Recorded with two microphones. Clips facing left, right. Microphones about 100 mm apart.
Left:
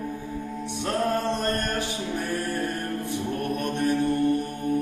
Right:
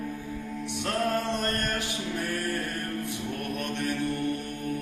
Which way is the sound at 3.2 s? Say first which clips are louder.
Left 5 dB; 25° left (ahead or behind).